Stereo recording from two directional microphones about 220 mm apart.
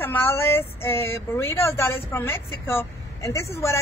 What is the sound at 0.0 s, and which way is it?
Speech, 10° left (ahead or behind).